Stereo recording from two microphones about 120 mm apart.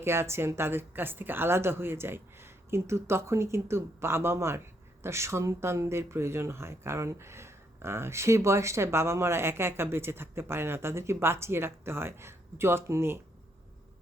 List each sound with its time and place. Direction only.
0.0 s speech: 20° right (ahead or behind)